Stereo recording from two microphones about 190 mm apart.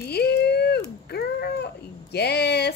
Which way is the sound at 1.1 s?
60° left (ahead or behind).